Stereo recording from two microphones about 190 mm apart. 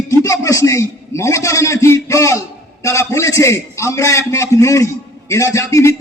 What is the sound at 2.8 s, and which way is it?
A man's voice, 15° left (ahead or behind).